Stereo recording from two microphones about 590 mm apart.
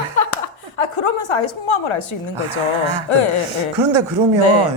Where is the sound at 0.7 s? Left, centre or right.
Left.